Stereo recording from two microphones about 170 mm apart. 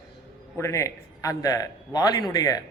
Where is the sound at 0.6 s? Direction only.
15° left (ahead or behind).